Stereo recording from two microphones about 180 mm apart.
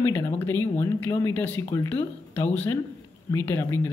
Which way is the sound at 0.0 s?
10° left (ahead or behind).